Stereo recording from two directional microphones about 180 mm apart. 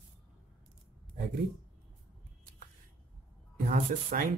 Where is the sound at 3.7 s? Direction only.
50° right (ahead or behind).